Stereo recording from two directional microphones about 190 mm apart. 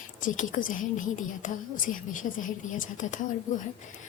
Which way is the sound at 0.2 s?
45° left (ahead or behind).